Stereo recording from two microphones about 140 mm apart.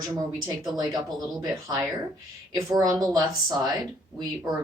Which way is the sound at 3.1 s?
30° right (ahead or behind).